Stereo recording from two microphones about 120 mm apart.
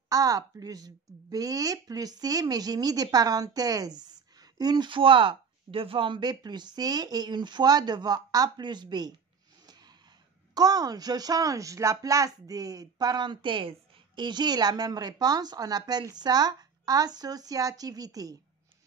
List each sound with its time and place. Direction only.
0.1 s a woman's voice: 30° right (ahead or behind)
10.5 s a woman's voice: 30° right (ahead or behind)